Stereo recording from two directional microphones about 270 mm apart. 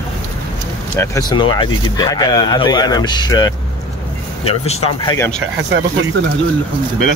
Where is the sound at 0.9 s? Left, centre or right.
Centre.